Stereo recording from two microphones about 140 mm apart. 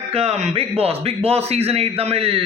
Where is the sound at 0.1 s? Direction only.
50° right (ahead or behind).